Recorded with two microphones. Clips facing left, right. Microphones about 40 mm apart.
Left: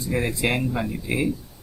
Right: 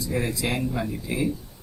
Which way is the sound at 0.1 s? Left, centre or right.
Left.